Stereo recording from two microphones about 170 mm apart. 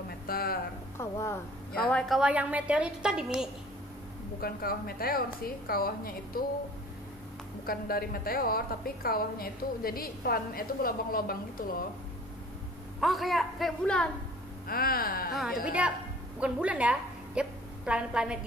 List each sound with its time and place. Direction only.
0.3 s speech: 60° left (ahead or behind)
0.9 s speech: 15° left (ahead or behind)
1.8 s a woman's voice: 5° left (ahead or behind)
4.4 s a woman's voice: 60° left (ahead or behind)
7.6 s a woman's voice: 60° left (ahead or behind)
13.0 s a woman's voice: centre (ahead or behind)
14.7 s a woman's voice: 60° left (ahead or behind)
15.6 s a woman's voice: 5° right (ahead or behind)